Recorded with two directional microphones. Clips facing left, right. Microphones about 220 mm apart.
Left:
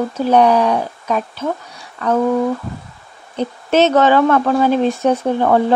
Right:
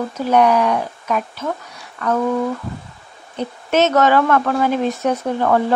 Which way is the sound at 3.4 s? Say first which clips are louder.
Left 3 dB; 30° left (ahead or behind).